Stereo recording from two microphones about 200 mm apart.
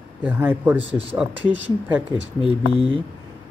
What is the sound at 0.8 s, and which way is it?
Speech, 30° right (ahead or behind).